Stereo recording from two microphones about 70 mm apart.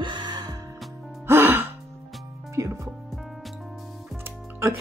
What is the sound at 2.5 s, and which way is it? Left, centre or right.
Music, right.